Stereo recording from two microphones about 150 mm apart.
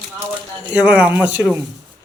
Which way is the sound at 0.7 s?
10° right (ahead or behind).